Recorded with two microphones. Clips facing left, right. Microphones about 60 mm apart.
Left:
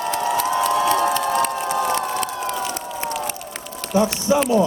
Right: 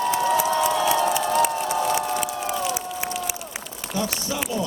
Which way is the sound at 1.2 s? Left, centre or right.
Centre.